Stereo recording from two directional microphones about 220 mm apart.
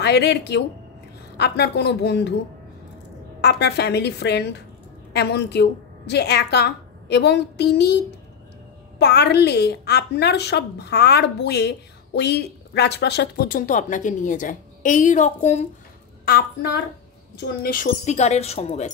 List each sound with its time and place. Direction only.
0.0 s a woman's voice: 50° left (ahead or behind)
3.3 s a woman's voice: 50° left (ahead or behind); by 15.6 s 30° left (ahead or behind)
16.3 s a woman's voice: 45° left (ahead or behind); by 18.9 s 30° left (ahead or behind)